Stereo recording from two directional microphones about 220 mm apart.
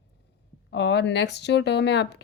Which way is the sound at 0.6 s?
50° left (ahead or behind).